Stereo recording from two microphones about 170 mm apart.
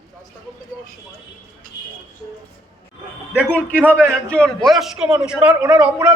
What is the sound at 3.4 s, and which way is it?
A man's voice, 10° left (ahead or behind).